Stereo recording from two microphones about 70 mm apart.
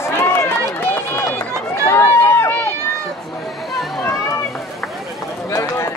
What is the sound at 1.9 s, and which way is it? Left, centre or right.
Run, left.